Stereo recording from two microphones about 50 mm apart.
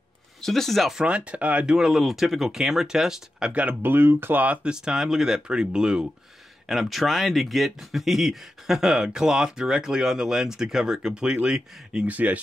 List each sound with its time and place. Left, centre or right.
0.4 s speech: centre
1.0 s speech: right
1.8 s speech: centre
3.8 s speech: right
4.6 s speech: centre
6.7 s speech: centre
12.1 s speech: right